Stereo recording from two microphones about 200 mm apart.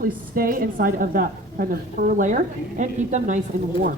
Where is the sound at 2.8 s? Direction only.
35° right (ahead or behind).